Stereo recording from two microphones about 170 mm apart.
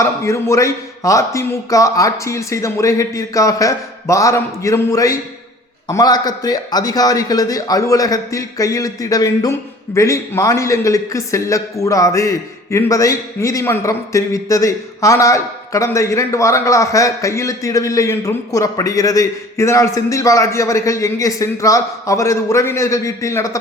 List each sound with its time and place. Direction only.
0.0 s a man's voice: 15° left (ahead or behind)